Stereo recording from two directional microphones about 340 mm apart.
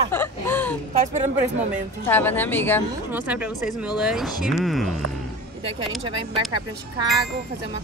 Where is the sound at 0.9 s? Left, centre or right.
Right.